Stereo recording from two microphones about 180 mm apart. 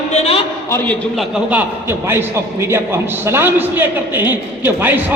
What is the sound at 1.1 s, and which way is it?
A man's voice, centre (ahead or behind).